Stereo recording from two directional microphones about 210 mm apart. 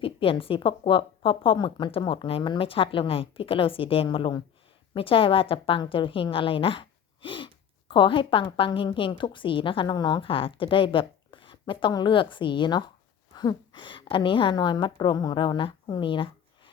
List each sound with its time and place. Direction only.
0.0 s a woman's voice: 25° left (ahead or behind)